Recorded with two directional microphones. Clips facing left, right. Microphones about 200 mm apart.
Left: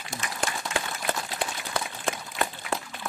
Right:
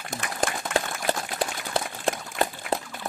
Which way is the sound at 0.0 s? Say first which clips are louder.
Right 4 dB; 55° right (ahead or behind).